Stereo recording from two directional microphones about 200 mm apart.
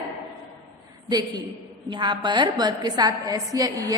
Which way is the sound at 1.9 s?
25° right (ahead or behind).